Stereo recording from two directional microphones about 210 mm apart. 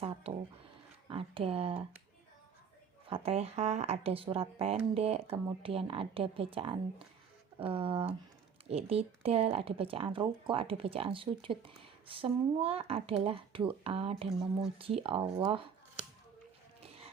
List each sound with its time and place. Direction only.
0.0 s speech: 30° right (ahead or behind)
3.1 s speech: 30° right (ahead or behind)